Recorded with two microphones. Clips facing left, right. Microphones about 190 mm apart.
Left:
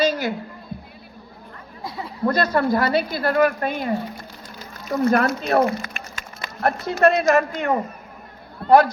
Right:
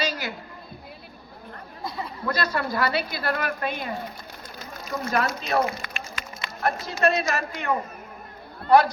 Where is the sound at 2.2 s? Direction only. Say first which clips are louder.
Left 8 dB; 50° left (ahead or behind).